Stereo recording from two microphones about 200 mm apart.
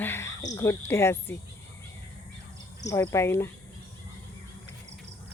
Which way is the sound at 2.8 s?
15° left (ahead or behind).